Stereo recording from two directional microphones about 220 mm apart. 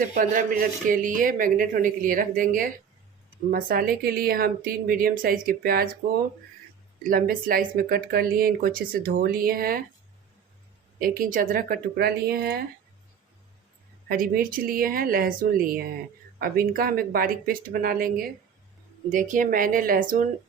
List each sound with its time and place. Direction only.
0.1 s speech: 40° right (ahead or behind)
7.1 s speech: 40° right (ahead or behind)
11.0 s speech: 40° right (ahead or behind)
14.1 s speech: 40° right (ahead or behind)